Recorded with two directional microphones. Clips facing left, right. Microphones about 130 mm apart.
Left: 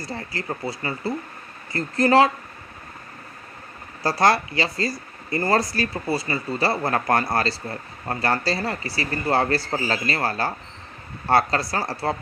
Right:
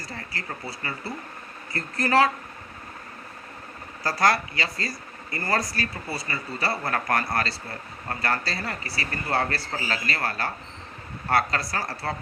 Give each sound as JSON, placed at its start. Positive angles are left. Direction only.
{"t": 0.0, "sound": "speech", "side_deg": 30}
{"t": 1.7, "sound": "speech", "side_deg": 25}
{"t": 4.0, "sound": "a man's voice", "side_deg": 30}